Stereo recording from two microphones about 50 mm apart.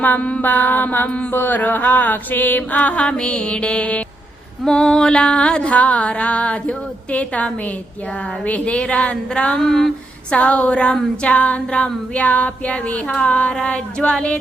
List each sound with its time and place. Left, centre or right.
0.0 s music: left
0.4 s music: left
1.3 s music: left
4.6 s music: centre
9.6 s speech: centre
10.3 s music: left